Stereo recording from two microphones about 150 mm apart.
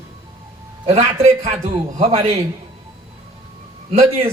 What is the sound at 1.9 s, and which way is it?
Speech, 60° right (ahead or behind).